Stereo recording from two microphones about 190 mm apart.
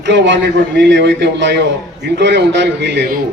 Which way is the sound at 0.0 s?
70° right (ahead or behind).